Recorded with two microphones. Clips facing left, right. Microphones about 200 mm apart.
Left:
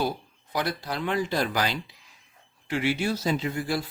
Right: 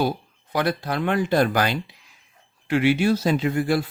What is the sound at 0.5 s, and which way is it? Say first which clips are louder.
Speech: right 6 dB; 60° right (ahead or behind).